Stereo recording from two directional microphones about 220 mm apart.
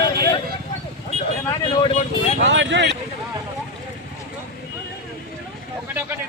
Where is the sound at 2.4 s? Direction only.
55° right (ahead or behind).